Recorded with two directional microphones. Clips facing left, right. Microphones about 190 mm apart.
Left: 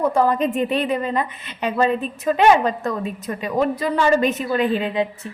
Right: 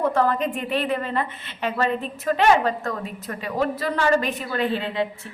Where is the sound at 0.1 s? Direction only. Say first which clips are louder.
Left 3 dB; 15° left (ahead or behind).